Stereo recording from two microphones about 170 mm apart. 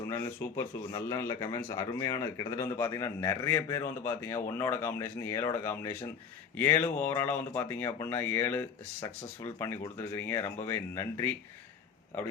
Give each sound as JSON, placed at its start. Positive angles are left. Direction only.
{"t": 0.1, "sound": "speech", "side_deg": 15}